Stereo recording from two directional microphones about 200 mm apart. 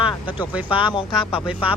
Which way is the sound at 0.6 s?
25° left (ahead or behind).